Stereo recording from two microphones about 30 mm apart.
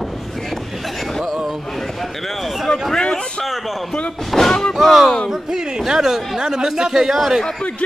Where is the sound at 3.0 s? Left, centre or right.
Left.